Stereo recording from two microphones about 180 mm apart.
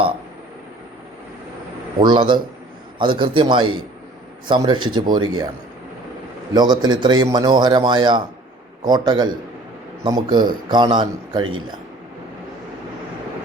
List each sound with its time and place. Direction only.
2.0 s a man's voice: 25° right (ahead or behind)
6.5 s a man's voice: 25° right (ahead or behind)